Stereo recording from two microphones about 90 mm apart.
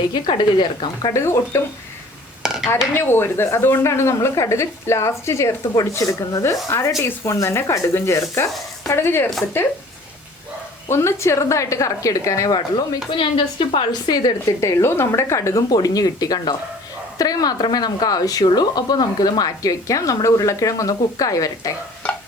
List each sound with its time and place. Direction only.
0.1 s speech: 55° left (ahead or behind)
1.1 s speech: 30° left (ahead or behind)
2.4 s dishes: 5° right (ahead or behind)
2.9 s speech: 25° left (ahead or behind)
10.8 s speech: 30° left (ahead or behind)
12.5 s speech: 55° left (ahead or behind)
13.1 s a woman's voice: 65° left (ahead or behind)
14.1 s speech: 55° left (ahead or behind)
14.6 s speech: 30° left (ahead or behind)